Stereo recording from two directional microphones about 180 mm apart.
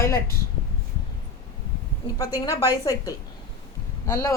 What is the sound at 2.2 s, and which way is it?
A woman's voice, 20° left (ahead or behind).